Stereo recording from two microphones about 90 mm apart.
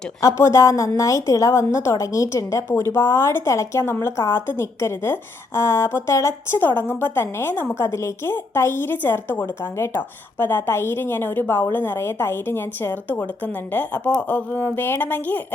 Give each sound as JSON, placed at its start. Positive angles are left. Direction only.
{"t": 0.2, "sound": "a woman's voice", "side_deg": 35}
{"t": 6.6, "sound": "a woman's voice", "side_deg": 20}